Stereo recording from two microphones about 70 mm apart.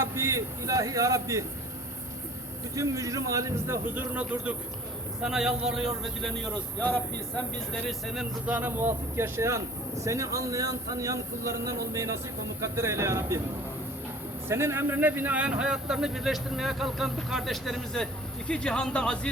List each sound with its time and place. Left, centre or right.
0.0 s speech: right
2.7 s speech: right
3.8 s speech: right
5.2 s a man's voice: centre
7.7 s a man's voice: centre
8.4 s speech: right
14.4 s a man's voice: right; by 19.3 s centre